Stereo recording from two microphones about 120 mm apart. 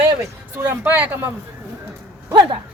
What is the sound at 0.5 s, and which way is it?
Speech, 15° right (ahead or behind).